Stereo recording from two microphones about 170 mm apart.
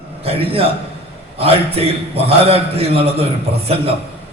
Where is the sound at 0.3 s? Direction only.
35° right (ahead or behind).